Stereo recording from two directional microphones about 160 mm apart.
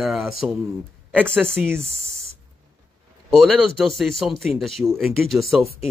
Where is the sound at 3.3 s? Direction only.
Centre (ahead or behind).